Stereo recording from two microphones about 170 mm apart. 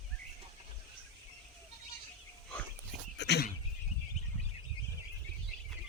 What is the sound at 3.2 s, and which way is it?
Dog, 80° left.